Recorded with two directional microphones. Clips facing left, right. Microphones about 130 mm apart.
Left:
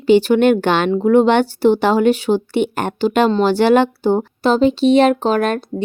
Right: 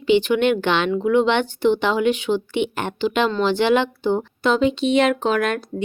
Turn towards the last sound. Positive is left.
turn(degrees=35)  # may be behind; listen again after turning